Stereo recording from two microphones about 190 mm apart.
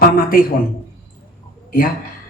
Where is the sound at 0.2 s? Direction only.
50° left (ahead or behind).